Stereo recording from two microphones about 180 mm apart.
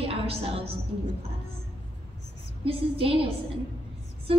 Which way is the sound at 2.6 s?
30° right (ahead or behind).